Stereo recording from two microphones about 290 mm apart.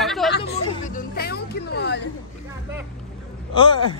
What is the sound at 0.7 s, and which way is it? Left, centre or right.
Music, left.